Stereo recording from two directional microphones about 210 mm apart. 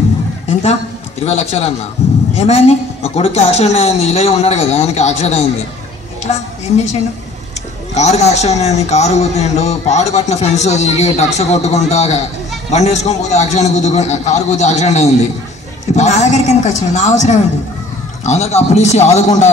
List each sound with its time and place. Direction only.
0.5 s a man's voice: 30° left (ahead or behind)
7.9 s a man's voice: 30° left (ahead or behind)